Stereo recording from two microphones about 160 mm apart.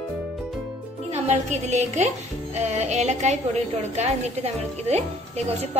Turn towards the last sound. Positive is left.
turn(degrees=-40)  # may be behind; listen again after turning